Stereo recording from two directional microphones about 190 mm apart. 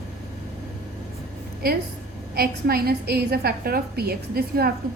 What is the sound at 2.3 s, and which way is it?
A woman's voice, 50° right (ahead or behind).